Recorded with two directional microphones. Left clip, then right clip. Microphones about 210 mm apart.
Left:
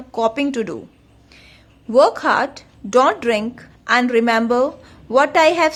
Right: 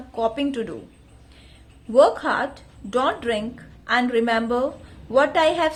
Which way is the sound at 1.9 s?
30° left (ahead or behind).